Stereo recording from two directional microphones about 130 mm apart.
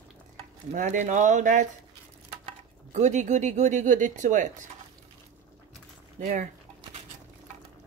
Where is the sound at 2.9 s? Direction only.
65° right (ahead or behind).